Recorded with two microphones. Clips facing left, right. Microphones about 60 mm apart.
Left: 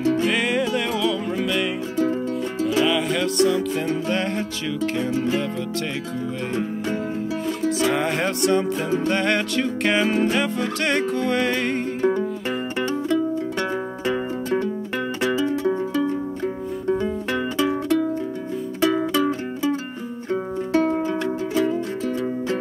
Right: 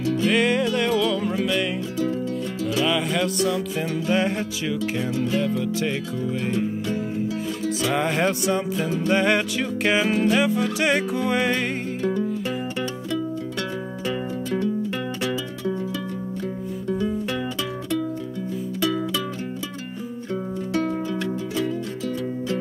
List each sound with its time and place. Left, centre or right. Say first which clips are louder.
0.0 s music: left 2 dB; left
0.3 s music: right 1 dB; centre
2.8 s music: left 1 dB; centre
5.1 s music: even; left
5.4 s music: right 2 dB; centre
7.8 s music: right 1 dB; centre
14.0 s music: left 2 dB; left
21.5 s music: left 6 dB; left